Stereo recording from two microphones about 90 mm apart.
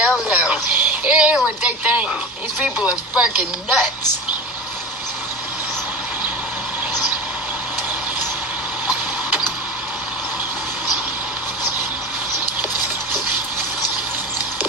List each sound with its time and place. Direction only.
0.0 s music: 15° right (ahead or behind)
1.6 s speech: 15° right (ahead or behind)